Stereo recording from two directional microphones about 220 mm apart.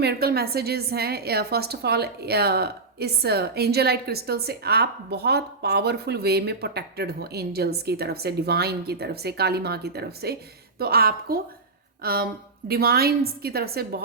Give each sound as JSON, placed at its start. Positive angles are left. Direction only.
{"t": 0.0, "sound": "a woman's voice", "side_deg": -45}